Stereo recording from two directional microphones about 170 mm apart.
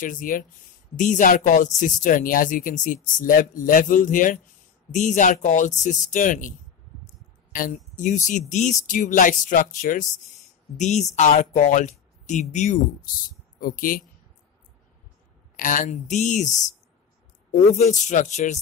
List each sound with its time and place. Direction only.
0.0 s speech: 55° left (ahead or behind)
7.5 s speech: 50° left (ahead or behind)
13.6 s speech: 55° left (ahead or behind)
15.5 s speech: 50° left (ahead or behind)